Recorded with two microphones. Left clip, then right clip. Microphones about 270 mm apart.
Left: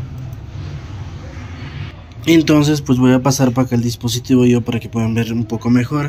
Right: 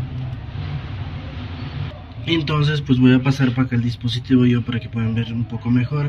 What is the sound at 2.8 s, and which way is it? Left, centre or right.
Speech, left.